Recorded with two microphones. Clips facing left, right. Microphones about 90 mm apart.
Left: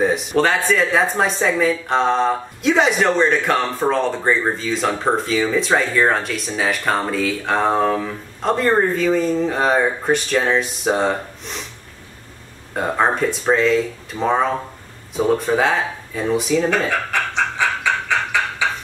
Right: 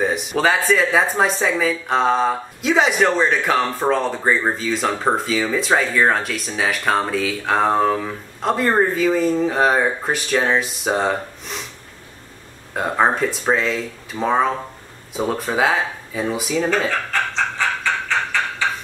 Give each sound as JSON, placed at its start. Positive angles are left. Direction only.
{"t": 0.0, "sound": "speech", "side_deg": 0}
{"t": 12.7, "sound": "speech", "side_deg": 0}
{"t": 17.1, "sound": "a sound", "side_deg": 15}